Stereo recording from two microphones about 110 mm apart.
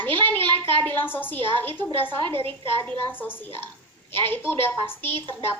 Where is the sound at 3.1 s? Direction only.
20° left (ahead or behind).